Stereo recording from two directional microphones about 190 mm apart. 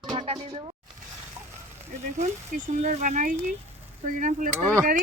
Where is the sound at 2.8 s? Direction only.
40° right (ahead or behind).